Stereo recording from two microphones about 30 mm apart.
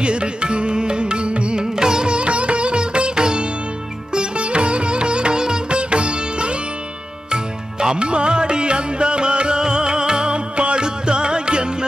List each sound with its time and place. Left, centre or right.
0.0 s music: right
1.6 s music: right
4.1 s sitar: right
7.8 s music: right